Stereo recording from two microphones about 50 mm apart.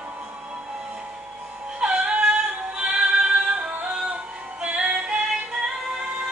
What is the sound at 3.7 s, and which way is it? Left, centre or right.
Music, right.